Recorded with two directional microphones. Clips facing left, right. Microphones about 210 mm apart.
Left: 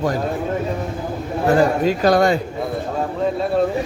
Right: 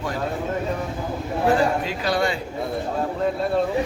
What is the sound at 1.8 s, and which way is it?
Speech, 45° left (ahead or behind).